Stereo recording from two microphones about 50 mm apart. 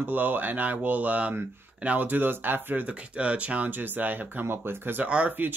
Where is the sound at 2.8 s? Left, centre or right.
Right.